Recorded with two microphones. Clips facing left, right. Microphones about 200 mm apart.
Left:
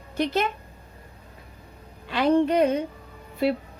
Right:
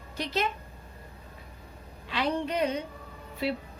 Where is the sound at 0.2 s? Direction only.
55° left (ahead or behind).